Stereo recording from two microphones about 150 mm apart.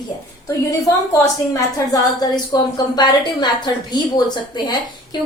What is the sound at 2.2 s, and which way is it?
A woman's voice, 25° left (ahead or behind).